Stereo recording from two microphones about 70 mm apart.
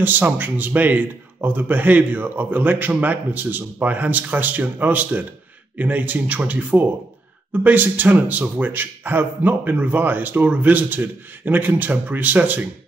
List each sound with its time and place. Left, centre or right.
0.0 s speech: right